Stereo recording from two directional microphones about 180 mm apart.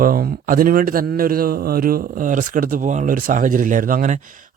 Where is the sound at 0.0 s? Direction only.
55° right (ahead or behind).